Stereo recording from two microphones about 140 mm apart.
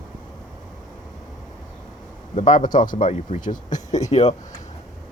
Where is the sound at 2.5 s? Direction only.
35° left (ahead or behind).